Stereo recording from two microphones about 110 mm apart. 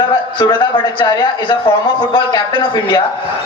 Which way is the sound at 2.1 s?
45° left (ahead or behind).